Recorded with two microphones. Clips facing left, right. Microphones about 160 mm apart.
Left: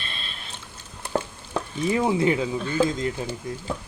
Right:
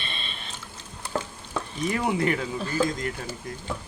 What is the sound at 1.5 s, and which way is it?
Stir, 25° left (ahead or behind).